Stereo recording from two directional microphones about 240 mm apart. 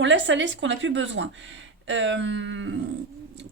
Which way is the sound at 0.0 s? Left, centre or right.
Right.